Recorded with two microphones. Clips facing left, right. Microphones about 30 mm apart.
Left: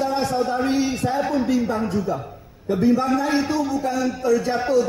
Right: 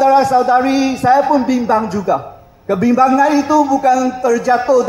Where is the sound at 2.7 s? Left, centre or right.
Right.